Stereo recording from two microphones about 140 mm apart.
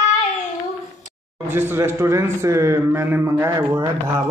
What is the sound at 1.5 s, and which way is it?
A man's voice, 15° right (ahead or behind).